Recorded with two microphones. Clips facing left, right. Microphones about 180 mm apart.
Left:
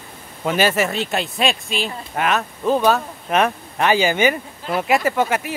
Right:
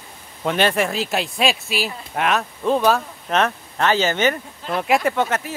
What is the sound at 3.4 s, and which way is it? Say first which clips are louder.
Speech: left 1 dB; 10° left (ahead or behind).